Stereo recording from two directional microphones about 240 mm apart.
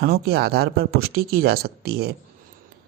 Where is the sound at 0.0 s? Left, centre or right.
Right.